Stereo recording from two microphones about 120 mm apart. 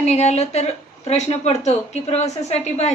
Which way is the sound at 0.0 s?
65° left (ahead or behind).